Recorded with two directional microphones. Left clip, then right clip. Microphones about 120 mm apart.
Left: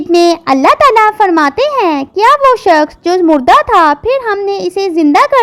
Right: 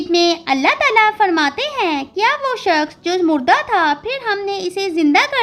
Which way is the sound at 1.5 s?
60° left (ahead or behind).